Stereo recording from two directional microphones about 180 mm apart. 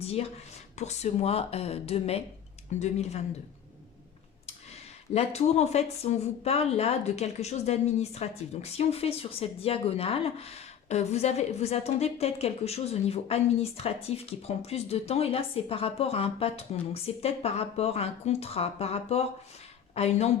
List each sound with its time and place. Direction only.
0.0 s speech: 35° left (ahead or behind)
5.1 s speech: 35° left (ahead or behind)